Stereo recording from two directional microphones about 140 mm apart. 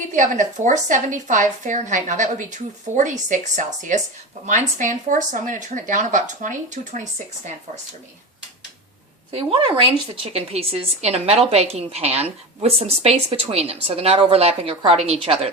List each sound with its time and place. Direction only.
0.1 s speech: 65° right (ahead or behind)
9.3 s a woman's voice: 40° right (ahead or behind)